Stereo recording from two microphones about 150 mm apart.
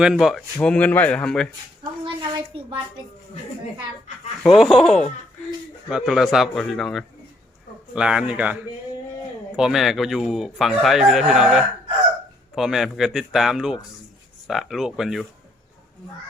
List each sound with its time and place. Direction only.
0.0 s speech: centre (ahead or behind)
2.3 s a sound: 30° right (ahead or behind)
4.4 s speech: centre (ahead or behind)
9.6 s speech: 5° right (ahead or behind)